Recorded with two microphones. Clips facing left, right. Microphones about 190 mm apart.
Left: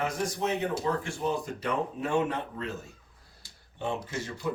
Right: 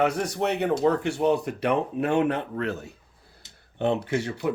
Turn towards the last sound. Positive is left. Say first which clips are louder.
# right 7 dB
turn(degrees=-65)  # may be behind; listen again after turning